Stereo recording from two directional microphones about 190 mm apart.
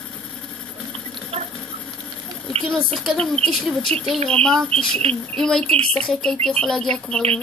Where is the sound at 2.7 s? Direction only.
Centre (ahead or behind).